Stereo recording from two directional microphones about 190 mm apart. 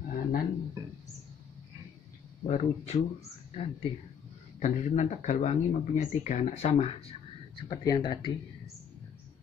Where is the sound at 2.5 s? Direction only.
35° left (ahead or behind).